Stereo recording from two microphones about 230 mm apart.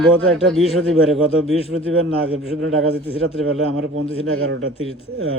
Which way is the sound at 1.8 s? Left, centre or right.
Right.